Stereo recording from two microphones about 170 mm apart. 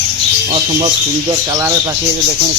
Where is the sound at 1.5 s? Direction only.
15° right (ahead or behind).